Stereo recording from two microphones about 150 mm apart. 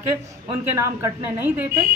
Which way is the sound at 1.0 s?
15° right (ahead or behind).